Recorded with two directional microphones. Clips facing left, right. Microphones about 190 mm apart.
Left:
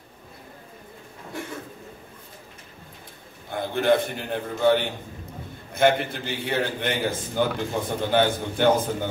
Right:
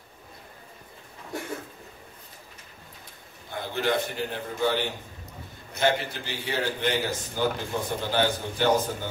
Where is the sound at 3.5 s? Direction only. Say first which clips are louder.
Left 6 dB; 55° left (ahead or behind).